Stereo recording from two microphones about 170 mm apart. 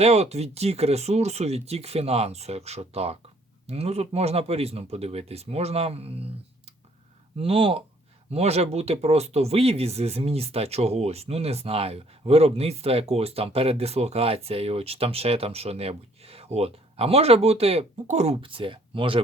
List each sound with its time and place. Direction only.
0.0 s speech: 40° right (ahead or behind)
7.3 s speech: 35° right (ahead or behind)